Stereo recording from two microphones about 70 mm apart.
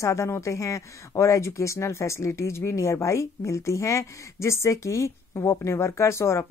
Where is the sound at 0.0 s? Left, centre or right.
Left.